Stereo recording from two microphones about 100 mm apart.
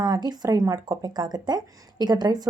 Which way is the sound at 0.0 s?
45° right (ahead or behind).